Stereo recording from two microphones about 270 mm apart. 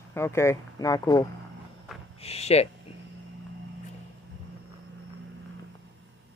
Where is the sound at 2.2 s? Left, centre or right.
Left.